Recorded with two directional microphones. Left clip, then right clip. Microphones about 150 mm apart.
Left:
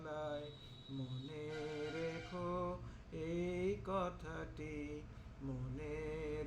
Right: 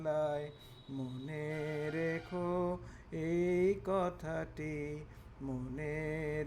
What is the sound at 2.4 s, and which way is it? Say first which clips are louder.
Music: right 6 dB; 50° right (ahead or behind).